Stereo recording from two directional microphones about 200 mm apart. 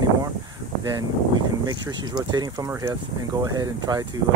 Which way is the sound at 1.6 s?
20° right (ahead or behind).